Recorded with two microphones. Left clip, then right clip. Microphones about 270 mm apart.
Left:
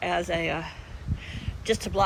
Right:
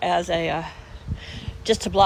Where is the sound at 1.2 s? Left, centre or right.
Centre.